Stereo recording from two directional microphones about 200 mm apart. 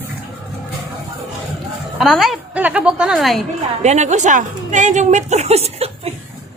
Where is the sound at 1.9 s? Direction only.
Centre (ahead or behind).